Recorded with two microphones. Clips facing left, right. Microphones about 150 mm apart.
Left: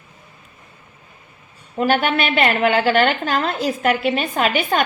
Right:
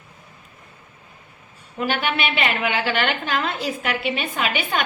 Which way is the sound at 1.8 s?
45° left (ahead or behind).